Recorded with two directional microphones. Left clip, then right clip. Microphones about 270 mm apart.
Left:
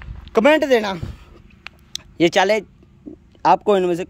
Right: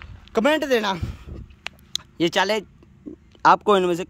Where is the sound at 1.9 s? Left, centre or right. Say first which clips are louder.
Left 5 dB; centre.